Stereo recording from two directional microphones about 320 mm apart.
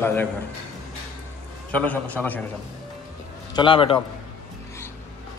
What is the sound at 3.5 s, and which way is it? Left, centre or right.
Speech, centre.